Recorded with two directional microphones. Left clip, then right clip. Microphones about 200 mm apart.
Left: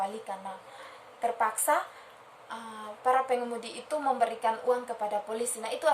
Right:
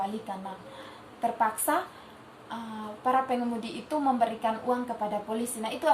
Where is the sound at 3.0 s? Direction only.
20° left (ahead or behind).